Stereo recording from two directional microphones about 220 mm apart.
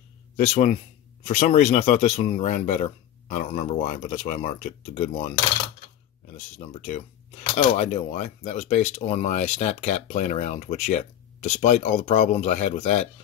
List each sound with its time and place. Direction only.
0.4 s speech: 35° left (ahead or behind)
6.3 s speech: 30° left (ahead or behind)